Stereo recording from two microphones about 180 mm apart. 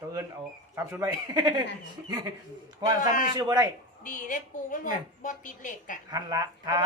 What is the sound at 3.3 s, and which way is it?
Speech, 20° right (ahead or behind).